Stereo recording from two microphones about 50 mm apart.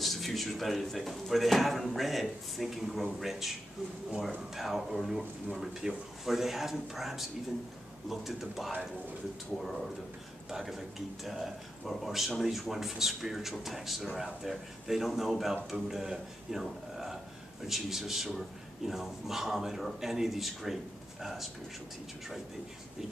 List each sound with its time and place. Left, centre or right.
0.0 s speech: centre
4.6 s speech: centre